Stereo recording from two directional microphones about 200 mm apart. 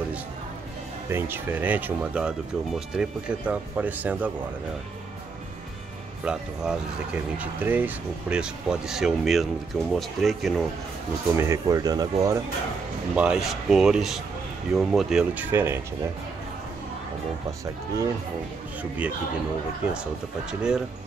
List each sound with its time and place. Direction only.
1.1 s speech: 10° right (ahead or behind)
6.2 s speech: 5° right (ahead or behind)
11.3 s speech: 15° right (ahead or behind)
13.1 s speech: 5° right (ahead or behind)
17.5 s speech: 15° right (ahead or behind)